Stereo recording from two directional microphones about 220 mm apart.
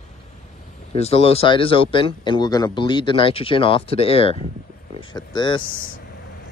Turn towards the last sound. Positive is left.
turn(degrees=40)  # may be behind; listen again after turning